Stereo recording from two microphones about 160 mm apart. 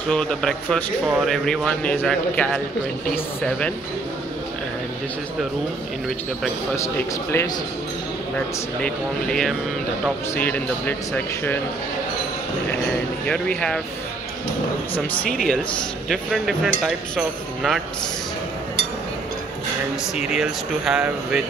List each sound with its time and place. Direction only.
0.1 s speech: 5° left (ahead or behind)
6.7 s speech: 15° left (ahead or behind)
8.8 s speech: 5° left (ahead or behind)
13.3 s speech: 5° left (ahead or behind)
15.1 s speech: 5° left (ahead or behind)
20.2 s speech: 5° right (ahead or behind)